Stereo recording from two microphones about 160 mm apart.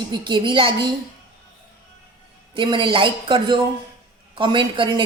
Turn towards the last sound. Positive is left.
turn(degrees=-30)  # may be behind; listen again after turning